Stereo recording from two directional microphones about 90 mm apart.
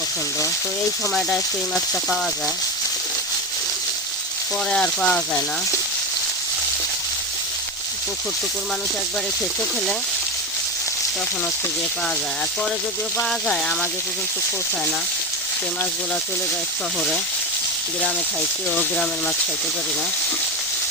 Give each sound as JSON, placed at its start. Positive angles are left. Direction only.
{"t": 1.1, "sound": "speech", "side_deg": 5}
{"t": 4.7, "sound": "speech", "side_deg": 10}
{"t": 18.7, "sound": "speech", "side_deg": 20}